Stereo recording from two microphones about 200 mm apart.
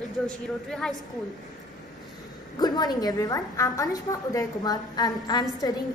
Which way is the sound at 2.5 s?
20° left (ahead or behind).